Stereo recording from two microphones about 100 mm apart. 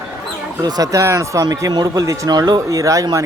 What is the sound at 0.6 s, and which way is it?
A man's voice, 40° right (ahead or behind).